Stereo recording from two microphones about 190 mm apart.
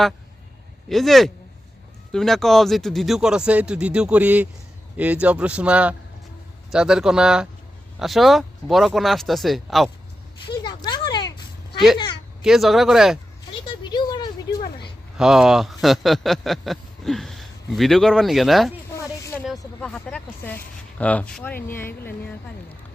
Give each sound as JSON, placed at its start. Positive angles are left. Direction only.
{"t": 0.9, "sound": "a man's voice", "side_deg": 0}
{"t": 10.4, "sound": "a sound", "side_deg": 25}
{"t": 12.4, "sound": "a man's voice", "side_deg": 0}
{"t": 13.5, "sound": "a sound", "side_deg": 25}
{"t": 15.2, "sound": "a man's voice", "side_deg": 0}
{"t": 19.8, "sound": "speech", "side_deg": 5}